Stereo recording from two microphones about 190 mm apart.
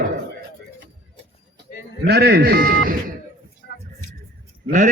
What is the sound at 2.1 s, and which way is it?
Speech, 55° right (ahead or behind).